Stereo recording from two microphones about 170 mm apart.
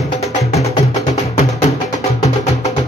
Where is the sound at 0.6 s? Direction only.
40° left (ahead or behind).